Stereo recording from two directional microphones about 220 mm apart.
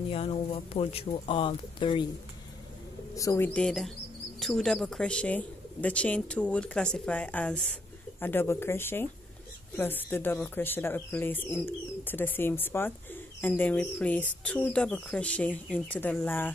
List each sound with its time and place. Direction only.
0.1 s speech: 25° left (ahead or behind)
3.2 s speech: 10° left (ahead or behind)